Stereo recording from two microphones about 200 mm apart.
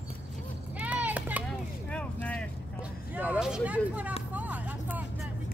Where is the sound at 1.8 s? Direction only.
5° left (ahead or behind).